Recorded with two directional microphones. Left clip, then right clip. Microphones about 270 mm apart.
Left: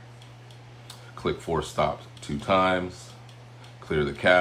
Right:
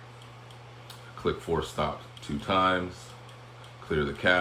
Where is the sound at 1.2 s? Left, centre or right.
Left.